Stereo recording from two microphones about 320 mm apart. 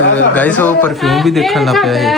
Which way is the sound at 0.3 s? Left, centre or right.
Centre.